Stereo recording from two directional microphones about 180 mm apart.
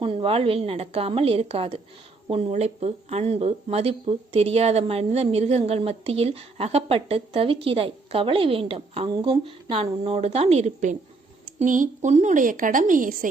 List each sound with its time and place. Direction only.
0.0 s a woman's voice: 30° right (ahead or behind); by 13.2 s 50° right (ahead or behind)